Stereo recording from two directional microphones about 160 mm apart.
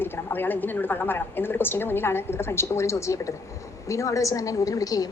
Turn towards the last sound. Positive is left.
turn(degrees=20)  # may be behind; listen again after turning